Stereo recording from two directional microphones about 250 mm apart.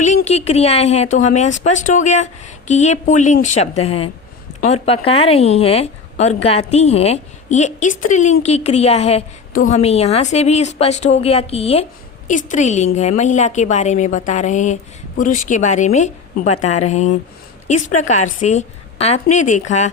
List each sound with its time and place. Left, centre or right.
0.0 s a woman's voice: left